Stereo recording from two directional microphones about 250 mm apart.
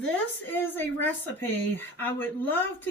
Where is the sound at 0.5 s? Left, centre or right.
Centre.